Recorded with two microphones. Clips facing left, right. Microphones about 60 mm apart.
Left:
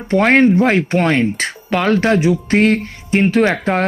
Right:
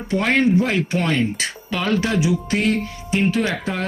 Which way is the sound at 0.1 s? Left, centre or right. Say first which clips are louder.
Left 6 dB; left.